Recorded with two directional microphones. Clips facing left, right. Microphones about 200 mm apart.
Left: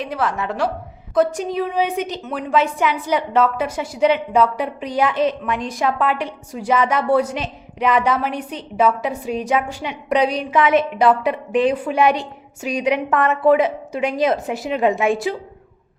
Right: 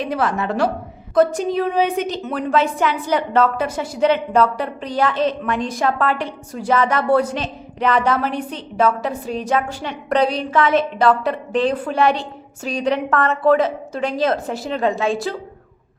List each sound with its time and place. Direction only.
0.0 s a woman's voice: centre (ahead or behind)
9.5 s a woman's voice: 15° left (ahead or behind)